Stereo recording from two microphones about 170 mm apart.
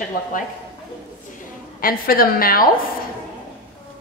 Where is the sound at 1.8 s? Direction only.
60° left (ahead or behind).